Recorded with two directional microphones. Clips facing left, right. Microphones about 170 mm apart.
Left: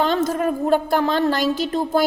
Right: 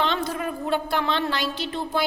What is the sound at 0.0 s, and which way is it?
A woman's voice, 45° left (ahead or behind).